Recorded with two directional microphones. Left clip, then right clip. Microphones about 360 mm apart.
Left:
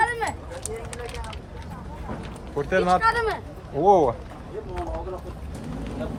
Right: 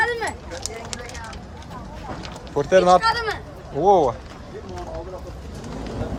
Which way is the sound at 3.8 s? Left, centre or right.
Centre.